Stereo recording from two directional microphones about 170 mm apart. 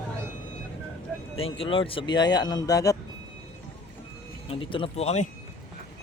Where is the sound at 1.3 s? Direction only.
35° left (ahead or behind).